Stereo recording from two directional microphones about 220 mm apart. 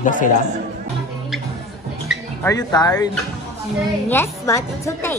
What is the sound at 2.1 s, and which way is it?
Speech, 10° left (ahead or behind).